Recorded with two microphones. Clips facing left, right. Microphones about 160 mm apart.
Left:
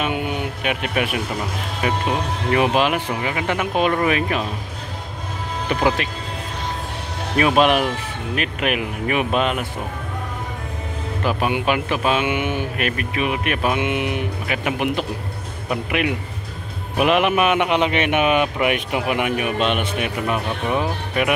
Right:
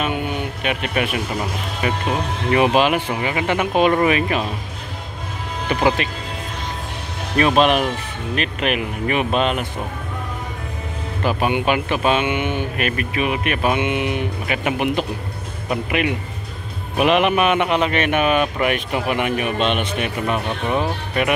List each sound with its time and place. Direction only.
0.0 s a sound: 10° left (ahead or behind)
1.8 s speech: centre (ahead or behind)
5.7 s speech: centre (ahead or behind)
7.3 s a man's voice: 10° left (ahead or behind)
11.2 s a man's voice: centre (ahead or behind)